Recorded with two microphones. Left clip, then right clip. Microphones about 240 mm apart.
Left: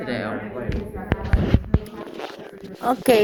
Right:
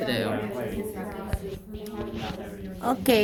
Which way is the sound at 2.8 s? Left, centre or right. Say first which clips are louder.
Left 5 dB; left.